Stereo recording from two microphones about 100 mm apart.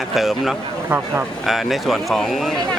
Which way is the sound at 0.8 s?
20° right (ahead or behind).